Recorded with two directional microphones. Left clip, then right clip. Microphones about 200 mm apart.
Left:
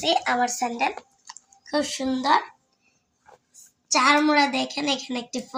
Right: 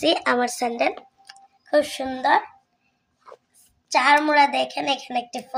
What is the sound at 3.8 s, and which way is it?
A woman's voice, 55° right (ahead or behind).